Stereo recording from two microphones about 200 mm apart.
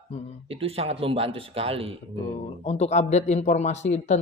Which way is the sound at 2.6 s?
35° left (ahead or behind).